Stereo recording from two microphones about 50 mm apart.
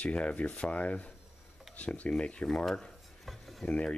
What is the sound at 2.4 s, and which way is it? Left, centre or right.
Dishes, centre.